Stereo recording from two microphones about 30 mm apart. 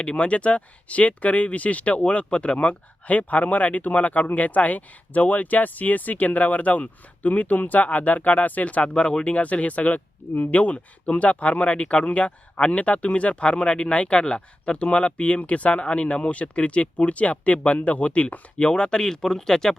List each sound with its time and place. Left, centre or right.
0.0 s speech: left
0.3 s speech: left
3.1 s speech: left
8.6 s speech: left
12.7 s speech: left
18.6 s speech: left